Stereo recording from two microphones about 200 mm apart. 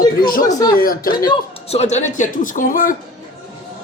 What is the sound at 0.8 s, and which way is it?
Speech, 45° left (ahead or behind).